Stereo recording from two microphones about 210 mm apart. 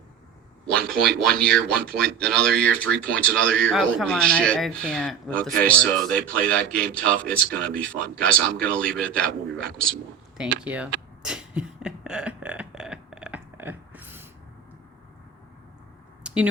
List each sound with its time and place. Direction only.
0.8 s speech: 50° right (ahead or behind)
1.4 s speech: 5° left (ahead or behind)
10.3 s speech: 5° right (ahead or behind)
11.2 s burping: 5° right (ahead or behind)
16.2 s a sound: 5° right (ahead or behind)